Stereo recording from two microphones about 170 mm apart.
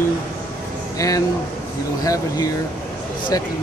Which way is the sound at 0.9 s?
20° left (ahead or behind).